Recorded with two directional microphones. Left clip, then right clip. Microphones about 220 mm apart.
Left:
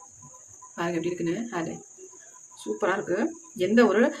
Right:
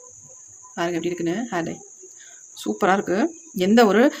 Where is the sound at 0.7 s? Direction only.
40° right (ahead or behind).